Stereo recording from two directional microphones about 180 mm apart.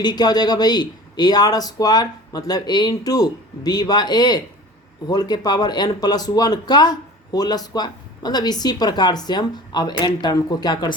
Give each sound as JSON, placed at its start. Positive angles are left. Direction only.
{"t": 0.0, "sound": "speech", "side_deg": 25}